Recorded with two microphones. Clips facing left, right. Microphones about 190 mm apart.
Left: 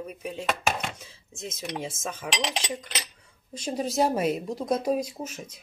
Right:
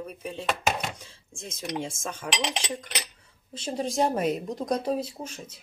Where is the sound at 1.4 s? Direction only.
5° left (ahead or behind).